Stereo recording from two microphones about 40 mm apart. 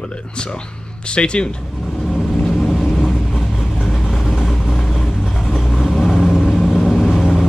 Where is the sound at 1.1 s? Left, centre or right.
Left.